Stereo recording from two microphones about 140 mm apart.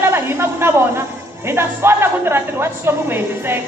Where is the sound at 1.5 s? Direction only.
15° right (ahead or behind).